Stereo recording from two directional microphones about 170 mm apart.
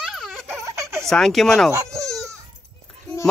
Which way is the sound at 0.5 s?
15° right (ahead or behind).